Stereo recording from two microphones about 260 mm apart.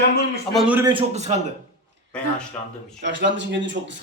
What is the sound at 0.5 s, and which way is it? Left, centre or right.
Speech, centre.